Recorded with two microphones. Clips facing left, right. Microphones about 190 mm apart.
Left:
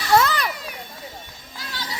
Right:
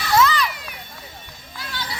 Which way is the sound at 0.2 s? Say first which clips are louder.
Right 3 dB; 55° left (ahead or behind).